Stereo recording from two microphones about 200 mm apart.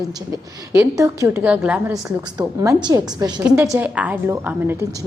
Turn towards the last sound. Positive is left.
turn(degrees=-10)  # may be behind; listen again after turning